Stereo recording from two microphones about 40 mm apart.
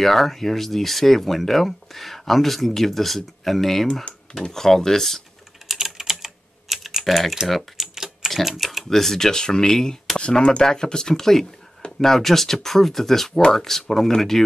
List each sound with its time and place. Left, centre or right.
0.0 s speech: centre
5.7 s typing: centre
7.0 s speech: centre
7.7 s typing: centre
8.3 s speech: centre
10.1 s speech: left